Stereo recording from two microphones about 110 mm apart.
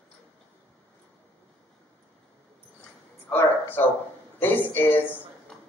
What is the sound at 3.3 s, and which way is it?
Speech, 20° left (ahead or behind).